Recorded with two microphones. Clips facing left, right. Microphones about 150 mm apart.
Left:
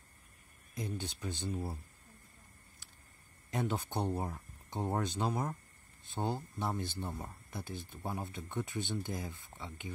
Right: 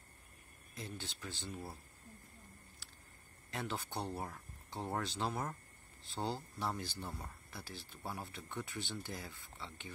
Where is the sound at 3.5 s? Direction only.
20° left (ahead or behind).